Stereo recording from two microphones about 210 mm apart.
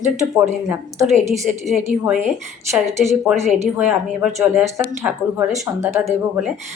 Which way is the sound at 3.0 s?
10° right (ahead or behind).